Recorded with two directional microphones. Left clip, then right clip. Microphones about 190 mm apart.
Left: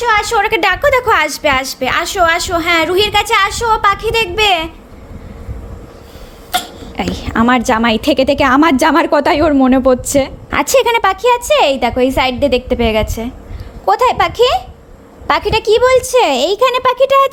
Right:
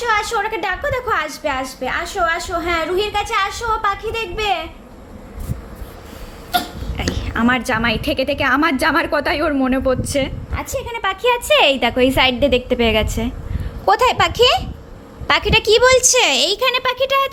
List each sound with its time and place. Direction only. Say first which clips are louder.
0.0 s a woman's voice: left 6 dB; 35° left (ahead or behind)
6.9 s a woman's voice: left 6 dB; 50° left (ahead or behind)
10.5 s a woman's voice: left 14 dB; 65° left (ahead or behind)
11.0 s a woman's voice: left 6 dB; 25° left (ahead or behind)
16.1 s a woman's voice: left 4 dB; 30° left (ahead or behind)